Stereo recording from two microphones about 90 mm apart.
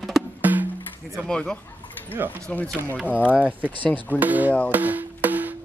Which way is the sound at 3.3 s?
15° right (ahead or behind).